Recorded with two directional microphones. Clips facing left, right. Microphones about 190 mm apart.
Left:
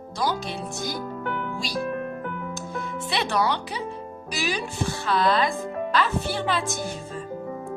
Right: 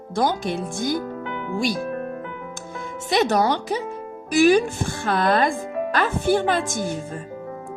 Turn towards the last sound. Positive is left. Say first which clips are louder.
# right 5 dB
turn(degrees=-50)  # may be behind; listen again after turning